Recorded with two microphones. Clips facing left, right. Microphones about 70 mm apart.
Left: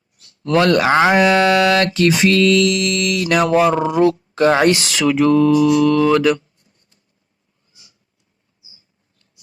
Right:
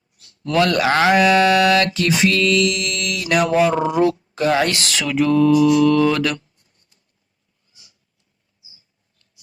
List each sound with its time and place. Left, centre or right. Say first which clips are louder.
0.4 s mantra: left 3 dB; left
0.9 s mantra: left 2 dB; left
3.9 s speech: left 3 dB; left
4.5 s speech: left 4 dB; left
4.8 s mantra: left 4 dB; centre